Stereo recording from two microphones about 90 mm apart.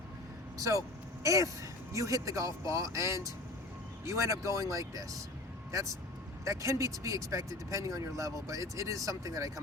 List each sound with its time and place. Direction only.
0.6 s speech: 40° right (ahead or behind)
6.4 s speech: 35° right (ahead or behind)